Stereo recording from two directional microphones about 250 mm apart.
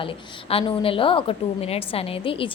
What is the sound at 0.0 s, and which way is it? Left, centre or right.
A woman's voice, left.